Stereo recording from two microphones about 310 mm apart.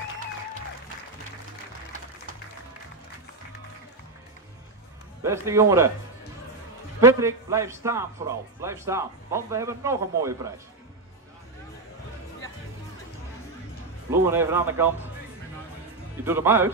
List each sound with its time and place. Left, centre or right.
5.2 s a man's voice: centre
7.0 s a man's voice: centre
14.1 s a man's voice: centre
16.3 s a man's voice: centre